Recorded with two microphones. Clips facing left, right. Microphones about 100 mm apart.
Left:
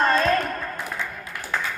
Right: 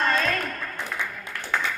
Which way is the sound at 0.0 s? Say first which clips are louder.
Left 4 dB; 35° left (ahead or behind).